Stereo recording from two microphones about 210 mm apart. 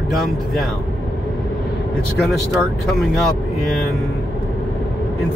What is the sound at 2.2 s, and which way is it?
Speech, centre (ahead or behind).